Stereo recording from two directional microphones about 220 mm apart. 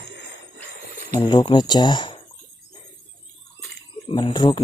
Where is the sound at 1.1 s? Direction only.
20° left (ahead or behind).